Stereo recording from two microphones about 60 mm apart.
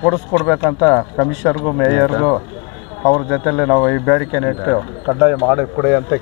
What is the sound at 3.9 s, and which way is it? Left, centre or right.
Speech, centre.